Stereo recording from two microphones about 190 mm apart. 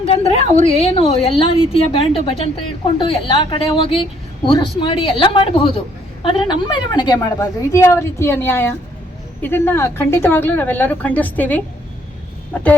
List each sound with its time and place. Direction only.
0.0 s a woman's voice: 30° left (ahead or behind); by 12.7 s 5° left (ahead or behind)